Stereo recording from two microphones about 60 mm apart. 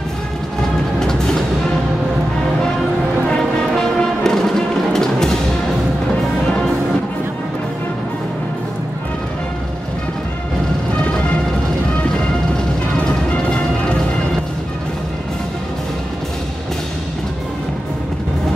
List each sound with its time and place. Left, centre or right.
0.9 s music: centre
3.3 s music: centre
6.4 s music: centre
11.0 s music: centre
12.9 s music: centre